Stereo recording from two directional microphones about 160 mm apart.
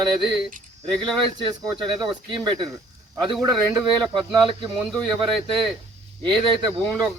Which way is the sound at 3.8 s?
25° right (ahead or behind).